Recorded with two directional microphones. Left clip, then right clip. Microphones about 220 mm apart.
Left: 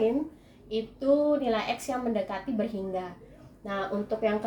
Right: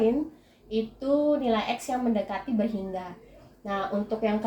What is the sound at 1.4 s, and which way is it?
A woman's voice, 30° left (ahead or behind).